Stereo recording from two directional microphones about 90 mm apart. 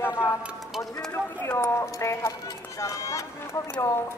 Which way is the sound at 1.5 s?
30° left (ahead or behind).